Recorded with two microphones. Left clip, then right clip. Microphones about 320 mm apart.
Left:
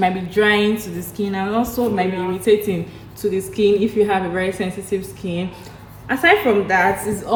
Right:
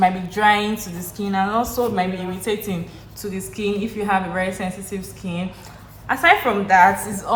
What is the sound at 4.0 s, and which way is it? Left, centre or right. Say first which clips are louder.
Speech: left 3 dB; right.